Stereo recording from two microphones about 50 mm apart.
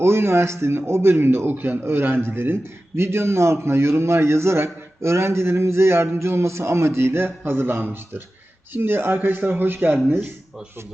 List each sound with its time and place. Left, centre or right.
0.0 s a man's voice: right